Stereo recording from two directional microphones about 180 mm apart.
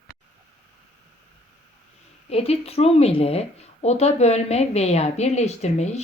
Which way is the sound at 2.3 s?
35° left (ahead or behind).